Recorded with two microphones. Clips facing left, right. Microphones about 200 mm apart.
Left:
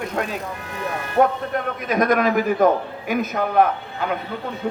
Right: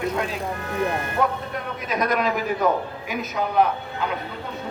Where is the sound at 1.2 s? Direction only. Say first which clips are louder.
Left 8 dB; 50° left (ahead or behind).